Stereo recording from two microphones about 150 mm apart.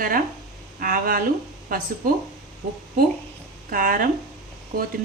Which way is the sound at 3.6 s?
70° right (ahead or behind).